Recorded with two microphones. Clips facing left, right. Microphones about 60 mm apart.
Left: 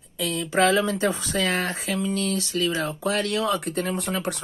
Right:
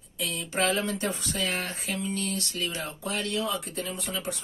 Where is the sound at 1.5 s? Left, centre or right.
Left.